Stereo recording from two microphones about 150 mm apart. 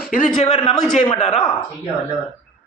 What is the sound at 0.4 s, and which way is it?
Speech, 35° left (ahead or behind).